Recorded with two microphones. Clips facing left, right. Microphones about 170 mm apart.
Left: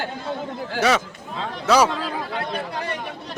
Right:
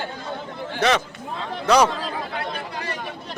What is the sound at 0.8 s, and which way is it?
Speech, 10° left (ahead or behind).